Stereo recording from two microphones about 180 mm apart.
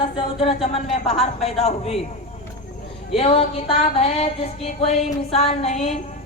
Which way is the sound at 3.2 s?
35° left (ahead or behind).